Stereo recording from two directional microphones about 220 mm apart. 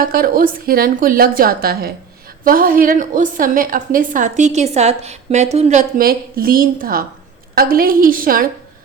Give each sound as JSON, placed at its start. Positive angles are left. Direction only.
{"t": 0.0, "sound": "a woman's voice", "side_deg": -40}